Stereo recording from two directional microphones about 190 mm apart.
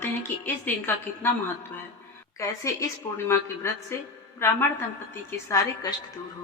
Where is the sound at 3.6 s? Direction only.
15° left (ahead or behind).